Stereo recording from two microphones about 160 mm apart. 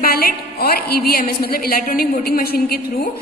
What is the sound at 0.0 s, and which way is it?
A woman's voice, 70° left (ahead or behind).